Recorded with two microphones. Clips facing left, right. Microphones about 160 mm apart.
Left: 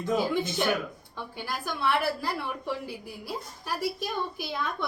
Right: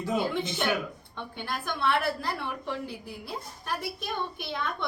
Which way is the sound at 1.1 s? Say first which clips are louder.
Even; 5° left (ahead or behind).